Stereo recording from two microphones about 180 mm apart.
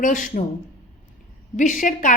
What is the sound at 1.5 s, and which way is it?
Speech, 45° left (ahead or behind).